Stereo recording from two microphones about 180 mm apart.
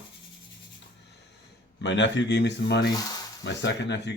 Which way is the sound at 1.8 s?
85° left.